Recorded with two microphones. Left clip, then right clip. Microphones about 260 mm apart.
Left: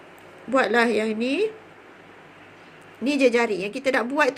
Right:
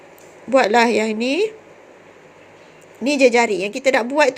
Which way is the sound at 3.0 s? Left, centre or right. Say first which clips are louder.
Right 6 dB; centre.